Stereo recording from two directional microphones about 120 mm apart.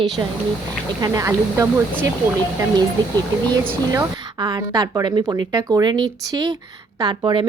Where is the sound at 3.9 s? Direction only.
40° right (ahead or behind).